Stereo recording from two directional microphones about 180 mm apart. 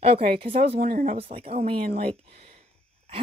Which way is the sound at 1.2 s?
30° right (ahead or behind).